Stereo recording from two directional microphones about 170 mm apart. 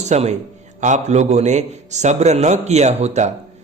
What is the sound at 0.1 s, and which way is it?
A man's voice, 40° right (ahead or behind).